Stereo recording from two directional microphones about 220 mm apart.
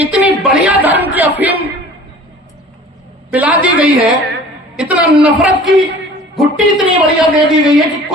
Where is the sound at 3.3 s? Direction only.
5° right (ahead or behind).